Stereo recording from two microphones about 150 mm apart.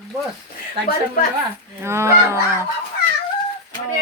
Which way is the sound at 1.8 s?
20° right (ahead or behind).